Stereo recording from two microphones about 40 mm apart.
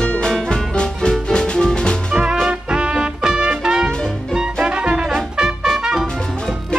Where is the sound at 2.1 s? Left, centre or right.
Right.